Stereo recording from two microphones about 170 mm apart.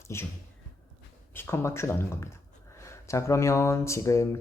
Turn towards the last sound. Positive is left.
turn(degrees=15)  # may be behind; listen again after turning